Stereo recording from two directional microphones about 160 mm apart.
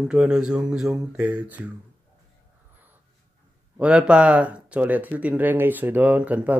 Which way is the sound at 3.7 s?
5° right (ahead or behind).